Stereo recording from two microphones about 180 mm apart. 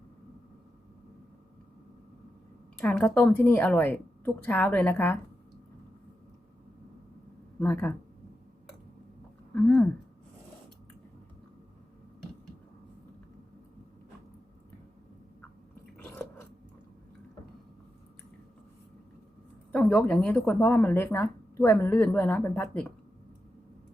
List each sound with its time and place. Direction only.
2.7 s speech: 5° left (ahead or behind)
7.6 s speech: 10° left (ahead or behind)
9.6 s a sound: 5° left (ahead or behind)
19.7 s speech: 5° left (ahead or behind)